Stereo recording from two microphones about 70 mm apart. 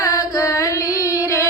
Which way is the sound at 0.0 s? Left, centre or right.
Left.